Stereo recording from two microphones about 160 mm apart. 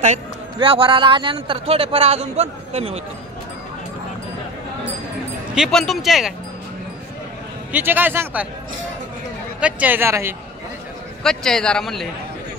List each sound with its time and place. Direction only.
0.6 s a man's voice: 35° right (ahead or behind)
5.5 s a man's voice: centre (ahead or behind)
7.7 s a man's voice: 10° right (ahead or behind)
9.6 s a man's voice: 10° right (ahead or behind)
11.2 s a man's voice: 5° left (ahead or behind)